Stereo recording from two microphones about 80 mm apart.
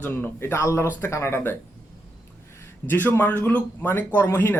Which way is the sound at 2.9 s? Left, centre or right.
Left.